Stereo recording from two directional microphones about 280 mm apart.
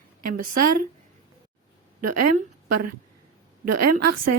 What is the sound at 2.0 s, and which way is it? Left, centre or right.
A woman's voice, right.